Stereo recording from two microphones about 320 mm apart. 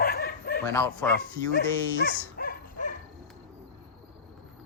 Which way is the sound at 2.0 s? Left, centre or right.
Left.